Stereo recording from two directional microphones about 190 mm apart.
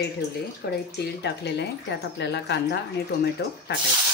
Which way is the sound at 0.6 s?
60° left (ahead or behind).